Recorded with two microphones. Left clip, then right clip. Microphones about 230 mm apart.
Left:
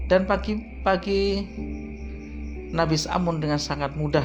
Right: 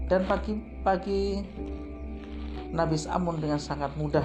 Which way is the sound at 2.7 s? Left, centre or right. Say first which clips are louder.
Left 4 dB; left.